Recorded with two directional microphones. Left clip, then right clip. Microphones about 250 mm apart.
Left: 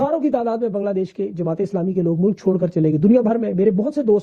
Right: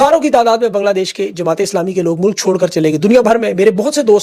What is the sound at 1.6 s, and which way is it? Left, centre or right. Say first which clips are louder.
Speech: right 7 dB; centre.